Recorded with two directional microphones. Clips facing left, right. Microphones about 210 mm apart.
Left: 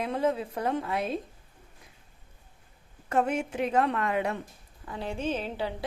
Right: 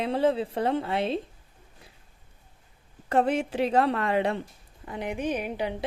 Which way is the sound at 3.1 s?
35° right (ahead or behind).